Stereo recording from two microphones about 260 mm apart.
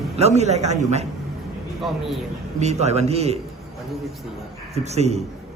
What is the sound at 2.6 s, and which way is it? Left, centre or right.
Speech, right.